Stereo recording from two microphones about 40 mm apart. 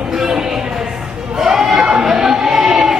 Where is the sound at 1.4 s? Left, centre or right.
Centre.